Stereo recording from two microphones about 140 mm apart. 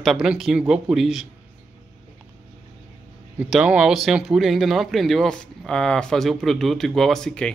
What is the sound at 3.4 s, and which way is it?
A man's voice, 5° right (ahead or behind).